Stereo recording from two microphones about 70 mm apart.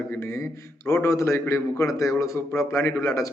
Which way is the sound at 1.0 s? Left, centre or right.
Left.